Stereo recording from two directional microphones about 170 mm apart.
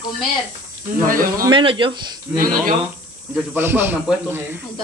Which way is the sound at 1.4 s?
30° right (ahead or behind).